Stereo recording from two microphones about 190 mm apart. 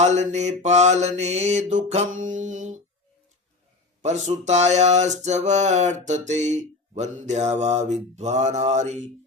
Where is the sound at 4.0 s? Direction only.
35° right (ahead or behind).